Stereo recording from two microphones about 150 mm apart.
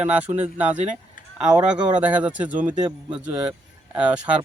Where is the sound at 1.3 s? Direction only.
5° right (ahead or behind).